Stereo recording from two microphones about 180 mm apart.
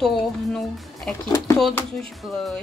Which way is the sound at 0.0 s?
Centre (ahead or behind).